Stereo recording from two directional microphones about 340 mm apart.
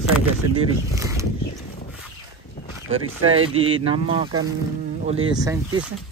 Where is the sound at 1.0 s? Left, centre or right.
Centre.